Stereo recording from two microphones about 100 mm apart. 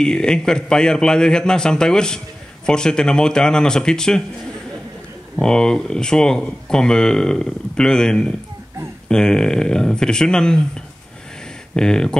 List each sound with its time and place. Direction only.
0.0 s a man's voice: 5° left (ahead or behind)
5.3 s a man's voice: 10° left (ahead or behind)
11.7 s a man's voice: 5° left (ahead or behind)